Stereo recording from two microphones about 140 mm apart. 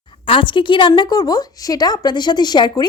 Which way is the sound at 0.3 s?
35° left (ahead or behind).